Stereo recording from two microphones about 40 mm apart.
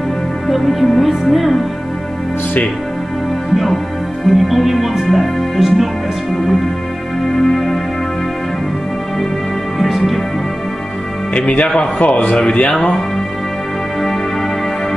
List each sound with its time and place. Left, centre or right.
0.5 s speech: centre
3.5 s speech: centre
7.2 s music: centre
9.8 s music: centre
11.3 s speech: left
12.4 s speech: left